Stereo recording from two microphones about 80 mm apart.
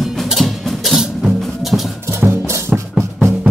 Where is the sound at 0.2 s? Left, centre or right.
Centre.